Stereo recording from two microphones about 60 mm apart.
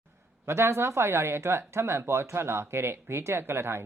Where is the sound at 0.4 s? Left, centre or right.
Right.